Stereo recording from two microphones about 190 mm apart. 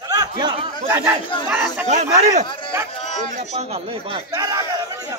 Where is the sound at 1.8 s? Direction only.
40° right (ahead or behind).